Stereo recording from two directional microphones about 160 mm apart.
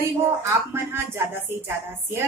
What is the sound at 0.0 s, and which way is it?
A woman's voice, 15° right (ahead or behind).